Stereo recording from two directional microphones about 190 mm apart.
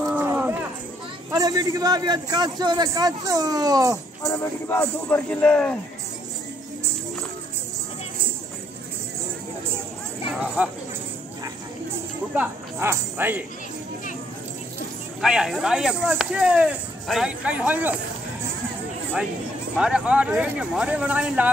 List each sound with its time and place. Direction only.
0.0 s a sound: 15° right (ahead or behind)
1.3 s a man's voice: 20° right (ahead or behind)
4.3 s a man's voice: 10° left (ahead or behind)
10.4 s speech: 5° right (ahead or behind)
12.4 s speech: 15° right (ahead or behind)
15.2 s speech: 5° right (ahead or behind)
19.8 s speech: 5° right (ahead or behind)